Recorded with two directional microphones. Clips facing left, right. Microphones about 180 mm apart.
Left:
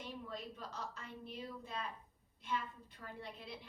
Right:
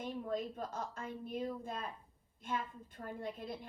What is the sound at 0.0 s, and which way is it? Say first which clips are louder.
A woman's voice: right 8 dB; 50° right (ahead or behind).